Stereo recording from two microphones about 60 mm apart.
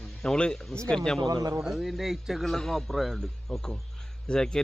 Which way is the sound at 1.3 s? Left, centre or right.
Right.